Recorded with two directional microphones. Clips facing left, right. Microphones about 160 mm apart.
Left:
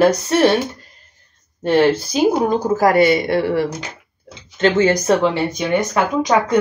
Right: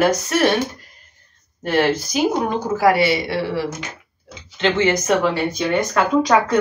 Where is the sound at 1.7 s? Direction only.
30° left (ahead or behind).